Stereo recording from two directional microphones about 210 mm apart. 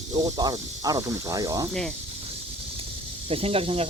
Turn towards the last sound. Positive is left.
turn(degrees=-25)  # may be behind; listen again after turning